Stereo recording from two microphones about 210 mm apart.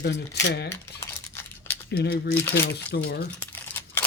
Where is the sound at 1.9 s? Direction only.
50° left (ahead or behind).